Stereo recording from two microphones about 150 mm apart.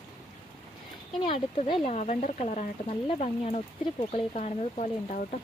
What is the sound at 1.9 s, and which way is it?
Speech, 50° left (ahead or behind).